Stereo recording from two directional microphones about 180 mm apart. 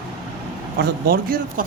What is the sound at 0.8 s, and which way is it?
Speech, 55° right (ahead or behind).